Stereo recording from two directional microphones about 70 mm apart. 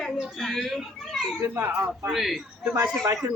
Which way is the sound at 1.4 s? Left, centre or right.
Right.